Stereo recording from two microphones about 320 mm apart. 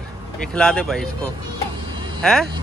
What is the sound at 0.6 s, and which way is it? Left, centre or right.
Speech, centre.